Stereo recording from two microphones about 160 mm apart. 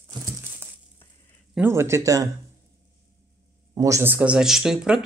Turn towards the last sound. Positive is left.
turn(degrees=-5)  # may be behind; listen again after turning